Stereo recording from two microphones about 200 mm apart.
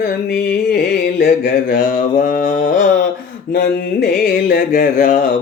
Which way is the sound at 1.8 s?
40° left (ahead or behind).